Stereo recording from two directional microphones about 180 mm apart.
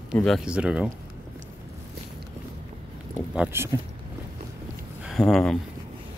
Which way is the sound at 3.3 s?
10° right (ahead or behind).